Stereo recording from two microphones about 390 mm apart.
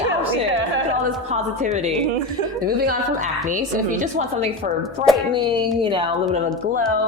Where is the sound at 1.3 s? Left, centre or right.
Centre.